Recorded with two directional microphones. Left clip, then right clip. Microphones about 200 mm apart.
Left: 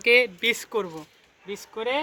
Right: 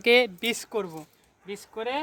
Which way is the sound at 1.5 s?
30° right (ahead or behind).